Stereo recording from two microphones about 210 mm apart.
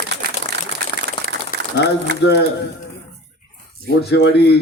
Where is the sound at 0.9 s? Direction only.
25° left (ahead or behind).